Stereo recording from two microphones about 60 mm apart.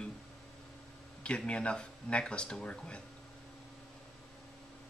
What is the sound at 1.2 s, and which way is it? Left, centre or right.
Speech, centre.